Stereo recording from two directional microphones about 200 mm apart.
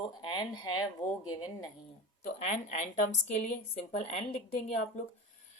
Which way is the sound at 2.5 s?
35° left (ahead or behind).